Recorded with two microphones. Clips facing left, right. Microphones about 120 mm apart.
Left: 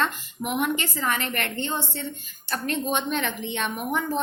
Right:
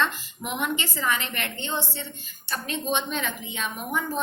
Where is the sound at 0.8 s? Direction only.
50° left (ahead or behind).